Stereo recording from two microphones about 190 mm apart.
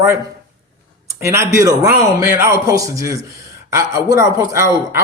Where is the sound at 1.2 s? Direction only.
15° right (ahead or behind).